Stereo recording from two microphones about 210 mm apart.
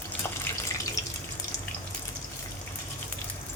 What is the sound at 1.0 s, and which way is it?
Water, 15° left (ahead or behind).